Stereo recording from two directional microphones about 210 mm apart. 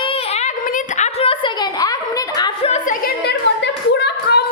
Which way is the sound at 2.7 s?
40° left (ahead or behind).